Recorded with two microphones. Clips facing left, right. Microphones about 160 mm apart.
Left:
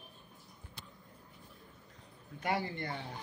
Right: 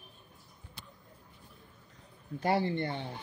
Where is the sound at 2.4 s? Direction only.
30° right (ahead or behind).